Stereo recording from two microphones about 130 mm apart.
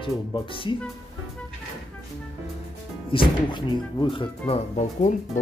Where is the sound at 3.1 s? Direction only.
40° left (ahead or behind).